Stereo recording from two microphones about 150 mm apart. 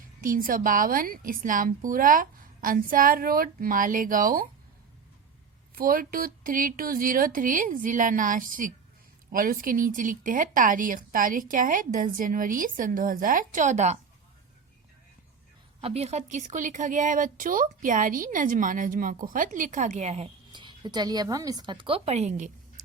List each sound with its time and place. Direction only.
0.2 s a woman's voice: 70° right (ahead or behind)
5.7 s a woman's voice: 70° right (ahead or behind); by 14.0 s 50° right (ahead or behind)
15.8 s speech: 45° right (ahead or behind)
20.5 s a woman's voice: 30° right (ahead or behind); by 22.5 s 50° right (ahead or behind)